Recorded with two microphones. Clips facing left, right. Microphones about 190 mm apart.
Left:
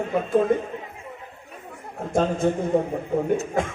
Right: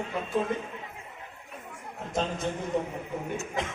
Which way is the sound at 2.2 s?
50° left (ahead or behind).